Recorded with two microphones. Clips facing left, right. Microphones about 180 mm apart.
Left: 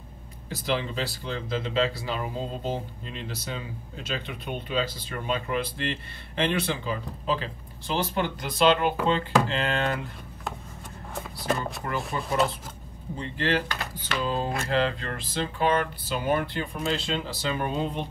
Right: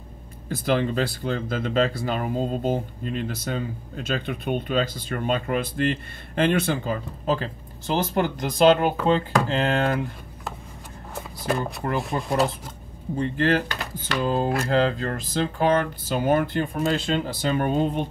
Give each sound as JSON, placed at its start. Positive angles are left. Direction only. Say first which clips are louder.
{"t": 0.5, "sound": "speech", "louder": "right 6 dB", "side_deg": -50}
{"t": 11.1, "sound": "speech", "louder": "right 3 dB", "side_deg": 0}
{"t": 12.1, "sound": "speech", "louder": "right 4 dB", "side_deg": -45}
{"t": 13.4, "sound": "speech", "louder": "right 3 dB", "side_deg": -45}